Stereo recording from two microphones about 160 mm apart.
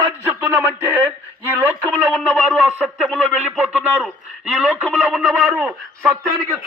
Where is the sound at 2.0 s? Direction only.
5° right (ahead or behind).